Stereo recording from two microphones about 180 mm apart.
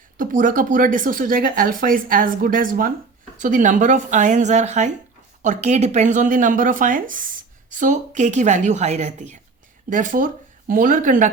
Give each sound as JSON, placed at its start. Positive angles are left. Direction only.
{"t": 0.2, "sound": "speech", "side_deg": -50}